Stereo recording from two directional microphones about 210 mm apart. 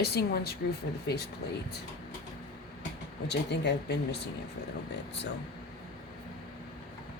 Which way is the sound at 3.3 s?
55° left (ahead or behind).